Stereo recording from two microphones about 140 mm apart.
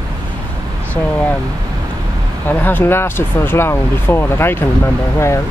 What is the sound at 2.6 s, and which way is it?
Speech, 15° left (ahead or behind).